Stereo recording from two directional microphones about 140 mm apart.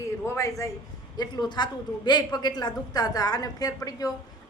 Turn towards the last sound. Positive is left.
turn(degrees=25)  # may be behind; listen again after turning